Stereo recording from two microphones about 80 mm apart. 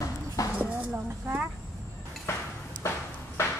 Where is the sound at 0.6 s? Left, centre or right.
Right.